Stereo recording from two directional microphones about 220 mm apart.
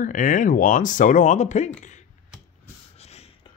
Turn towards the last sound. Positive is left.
turn(degrees=30)  # may be behind; listen again after turning